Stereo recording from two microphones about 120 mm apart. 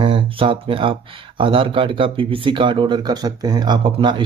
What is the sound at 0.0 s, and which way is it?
Speech, 45° right (ahead or behind).